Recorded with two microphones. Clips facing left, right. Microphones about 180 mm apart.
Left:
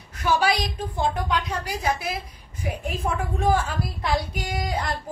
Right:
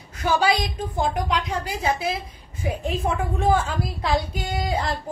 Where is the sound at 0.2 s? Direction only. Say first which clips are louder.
Right 1 dB; 30° right (ahead or behind).